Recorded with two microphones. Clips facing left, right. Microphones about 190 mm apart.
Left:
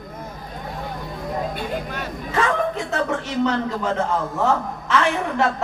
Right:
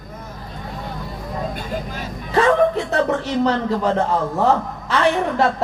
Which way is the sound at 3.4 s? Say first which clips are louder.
Right 3 dB; 35° right (ahead or behind).